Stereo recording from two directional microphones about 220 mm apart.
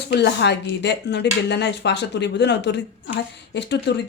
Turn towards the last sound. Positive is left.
turn(degrees=50)  # may be behind; listen again after turning